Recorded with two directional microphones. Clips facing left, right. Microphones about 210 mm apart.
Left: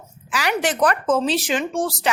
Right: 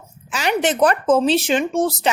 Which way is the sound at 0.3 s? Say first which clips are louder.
Right 3 dB; 25° right (ahead or behind).